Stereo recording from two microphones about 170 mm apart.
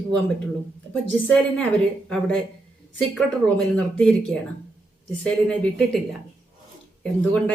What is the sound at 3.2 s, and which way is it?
Speech, 5° left (ahead or behind).